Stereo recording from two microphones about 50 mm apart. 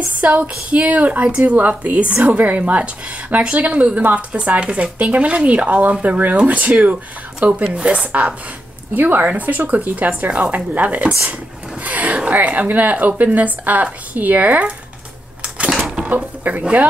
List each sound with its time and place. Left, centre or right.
0.2 s speech: right
8.9 s speech: right
16.1 s speech: right